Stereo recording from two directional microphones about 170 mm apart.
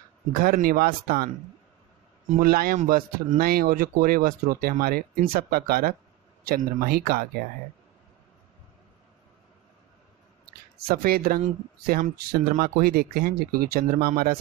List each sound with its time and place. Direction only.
0.3 s speech: 55° right (ahead or behind)
2.3 s speech: 60° right (ahead or behind)
10.9 s speech: 60° right (ahead or behind)